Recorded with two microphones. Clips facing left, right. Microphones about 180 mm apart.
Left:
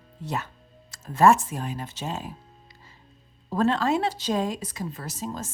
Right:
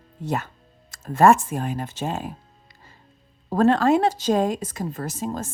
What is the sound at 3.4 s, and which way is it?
Speech, 50° right (ahead or behind).